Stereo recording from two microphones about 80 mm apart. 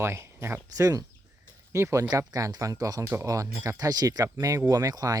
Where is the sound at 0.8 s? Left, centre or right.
Right.